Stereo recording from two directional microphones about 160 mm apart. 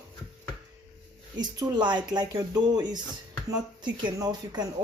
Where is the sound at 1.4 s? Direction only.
25° right (ahead or behind).